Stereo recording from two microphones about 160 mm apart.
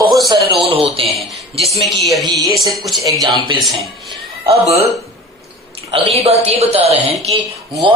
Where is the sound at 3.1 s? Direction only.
25° right (ahead or behind).